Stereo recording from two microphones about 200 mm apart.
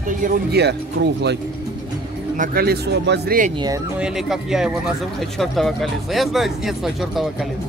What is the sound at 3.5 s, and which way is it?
Speech, 20° right (ahead or behind).